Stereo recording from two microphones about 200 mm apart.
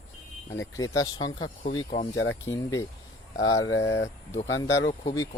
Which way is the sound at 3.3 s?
75° left (ahead or behind).